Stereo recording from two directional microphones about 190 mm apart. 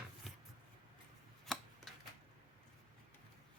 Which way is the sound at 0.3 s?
Centre (ahead or behind).